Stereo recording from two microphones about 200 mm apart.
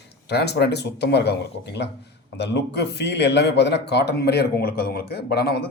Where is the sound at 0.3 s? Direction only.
55° left (ahead or behind).